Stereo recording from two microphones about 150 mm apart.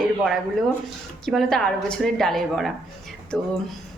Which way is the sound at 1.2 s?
Centre (ahead or behind).